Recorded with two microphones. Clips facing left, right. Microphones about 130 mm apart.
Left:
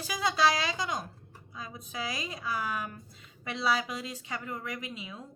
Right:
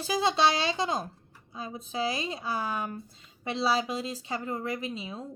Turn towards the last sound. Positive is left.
turn(degrees=-30)  # may be behind; listen again after turning